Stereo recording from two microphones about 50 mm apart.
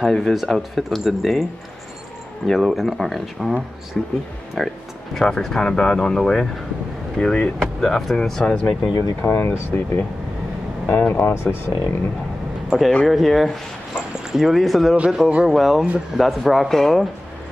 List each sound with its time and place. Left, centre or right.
0.0 s speech: centre
2.4 s speech: centre
3.9 s speech: centre
4.6 s speech: centre
5.1 s speech: centre
9.2 s speech: left
12.6 s speech: centre
15.0 s speech: centre